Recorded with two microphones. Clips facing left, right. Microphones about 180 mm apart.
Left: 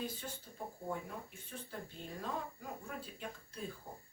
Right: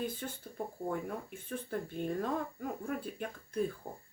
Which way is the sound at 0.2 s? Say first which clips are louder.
Right 6 dB; 55° right (ahead or behind).